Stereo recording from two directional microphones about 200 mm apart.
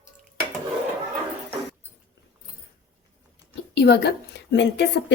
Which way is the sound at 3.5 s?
55° left (ahead or behind).